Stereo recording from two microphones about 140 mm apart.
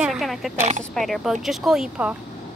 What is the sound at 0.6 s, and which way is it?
Speech, 60° right (ahead or behind).